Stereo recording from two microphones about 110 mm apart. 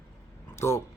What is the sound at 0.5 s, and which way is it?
Speech, 25° left (ahead or behind).